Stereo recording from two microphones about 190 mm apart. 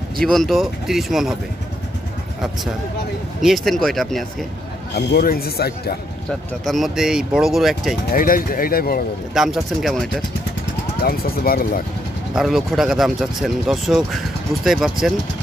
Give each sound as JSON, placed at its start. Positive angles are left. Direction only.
{"t": 0.2, "sound": "speech", "side_deg": 0}
{"t": 3.3, "sound": "speech", "side_deg": 0}
{"t": 4.9, "sound": "speech", "side_deg": 55}
{"t": 6.6, "sound": "speech", "side_deg": 0}
{"t": 8.1, "sound": "speech", "side_deg": 45}
{"t": 9.3, "sound": "speech", "side_deg": 0}
{"t": 11.0, "sound": "speech", "side_deg": 50}
{"t": 12.4, "sound": "speech", "side_deg": 0}